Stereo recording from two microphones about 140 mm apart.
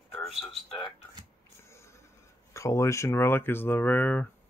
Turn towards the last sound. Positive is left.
turn(degrees=15)  # may be behind; listen again after turning